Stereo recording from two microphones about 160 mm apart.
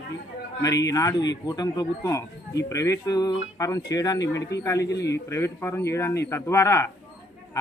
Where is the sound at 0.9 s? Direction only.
20° left (ahead or behind).